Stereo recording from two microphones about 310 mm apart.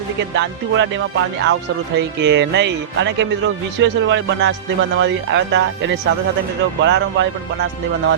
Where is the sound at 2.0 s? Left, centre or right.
Right.